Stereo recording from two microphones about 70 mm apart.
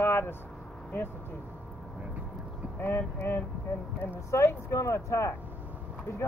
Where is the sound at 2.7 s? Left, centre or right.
Left.